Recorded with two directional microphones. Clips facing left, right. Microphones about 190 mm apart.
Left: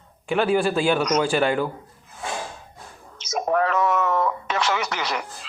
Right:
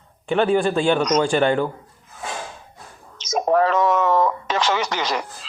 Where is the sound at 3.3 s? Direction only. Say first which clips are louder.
Right 4 dB; 30° right (ahead or behind).